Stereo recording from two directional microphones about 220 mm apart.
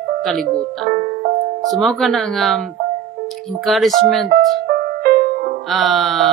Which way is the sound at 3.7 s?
Centre (ahead or behind).